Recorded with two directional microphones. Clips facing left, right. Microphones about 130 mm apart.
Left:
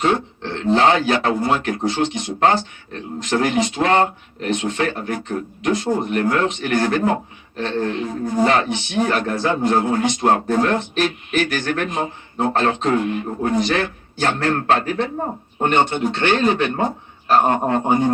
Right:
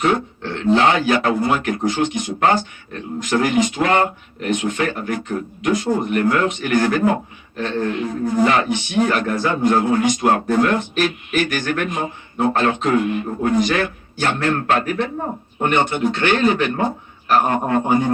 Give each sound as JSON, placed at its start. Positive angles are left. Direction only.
{"t": 0.0, "sound": "a man's voice", "side_deg": 25}